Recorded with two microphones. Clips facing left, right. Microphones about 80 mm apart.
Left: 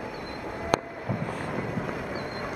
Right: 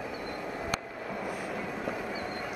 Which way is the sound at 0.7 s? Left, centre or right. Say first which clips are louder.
Left 9 dB; left.